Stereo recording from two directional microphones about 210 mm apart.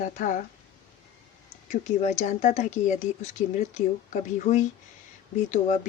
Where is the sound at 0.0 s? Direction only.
40° left (ahead or behind).